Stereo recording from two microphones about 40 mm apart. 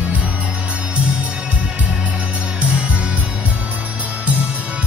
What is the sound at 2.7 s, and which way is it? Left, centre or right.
Music, right.